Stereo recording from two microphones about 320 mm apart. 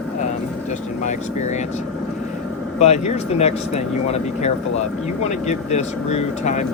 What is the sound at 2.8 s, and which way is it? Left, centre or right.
Speech, centre.